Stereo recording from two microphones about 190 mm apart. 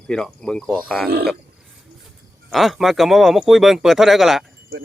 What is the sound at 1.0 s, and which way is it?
Speech, 55° right (ahead or behind).